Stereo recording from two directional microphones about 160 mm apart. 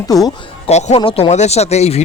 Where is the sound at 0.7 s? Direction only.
45° left (ahead or behind).